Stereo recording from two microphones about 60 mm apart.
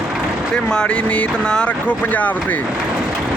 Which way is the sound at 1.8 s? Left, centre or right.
Left.